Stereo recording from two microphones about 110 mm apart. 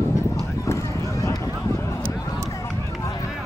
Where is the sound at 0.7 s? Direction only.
30° left (ahead or behind).